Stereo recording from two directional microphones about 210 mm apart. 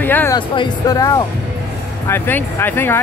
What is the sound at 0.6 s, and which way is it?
Speech, 15° left (ahead or behind).